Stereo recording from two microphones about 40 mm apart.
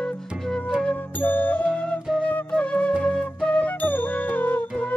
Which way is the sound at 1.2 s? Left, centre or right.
Left.